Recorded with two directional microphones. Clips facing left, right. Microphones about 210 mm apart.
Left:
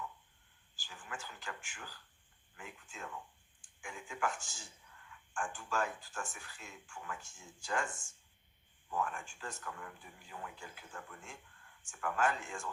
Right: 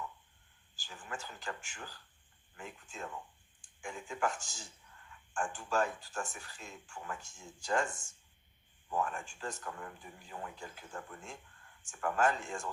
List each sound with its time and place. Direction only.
0.9 s speech: 40° right (ahead or behind)
8.9 s speech: 40° right (ahead or behind)